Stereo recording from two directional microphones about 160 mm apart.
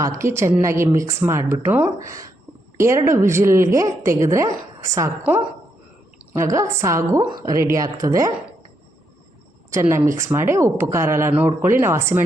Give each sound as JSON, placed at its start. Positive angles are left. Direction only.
{"t": 0.0, "sound": "a woman's voice", "side_deg": -20}
{"t": 9.6, "sound": "a woman's voice", "side_deg": -20}